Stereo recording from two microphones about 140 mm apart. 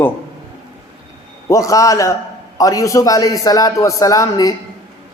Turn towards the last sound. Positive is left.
turn(degrees=25)  # may be behind; listen again after turning